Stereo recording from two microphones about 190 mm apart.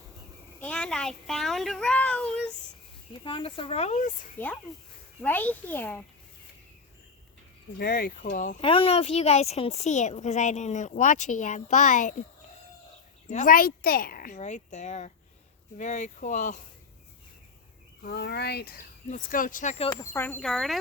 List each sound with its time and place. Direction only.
0.6 s a child's voice: 5° left (ahead or behind)
3.2 s a woman's voice: 25° left (ahead or behind)
4.4 s speech: 10° left (ahead or behind)
7.8 s speech: 50° left (ahead or behind)
8.6 s a woman's voice: 30° left (ahead or behind)
13.3 s a woman's voice: 45° left (ahead or behind)
18.0 s speech: 60° left (ahead or behind)
19.8 s speech: 20° left (ahead or behind); by 20.7 s centre (ahead or behind)